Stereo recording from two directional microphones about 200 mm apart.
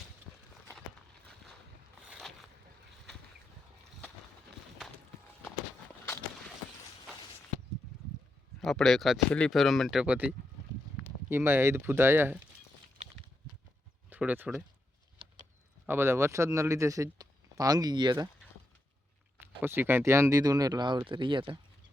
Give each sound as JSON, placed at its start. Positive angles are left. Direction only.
{"t": 2.0, "sound": "boat", "side_deg": 0}
{"t": 8.6, "sound": "speech", "side_deg": 0}
{"t": 14.1, "sound": "speech", "side_deg": -10}
{"t": 15.9, "sound": "speech", "side_deg": -10}
{"t": 19.6, "sound": "speech", "side_deg": -10}